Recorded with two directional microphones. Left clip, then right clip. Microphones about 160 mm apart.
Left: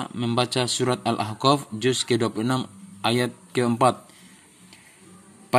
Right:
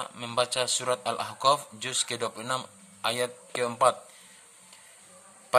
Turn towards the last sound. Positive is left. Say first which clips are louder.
# left 3 dB
turn(degrees=20)  # may be behind; listen again after turning